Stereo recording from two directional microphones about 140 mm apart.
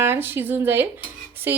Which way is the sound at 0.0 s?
15° right (ahead or behind).